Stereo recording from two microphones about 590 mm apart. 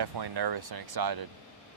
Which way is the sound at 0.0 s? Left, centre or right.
Right.